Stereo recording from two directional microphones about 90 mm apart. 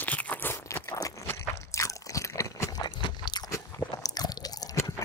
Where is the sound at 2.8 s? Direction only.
50° left (ahead or behind).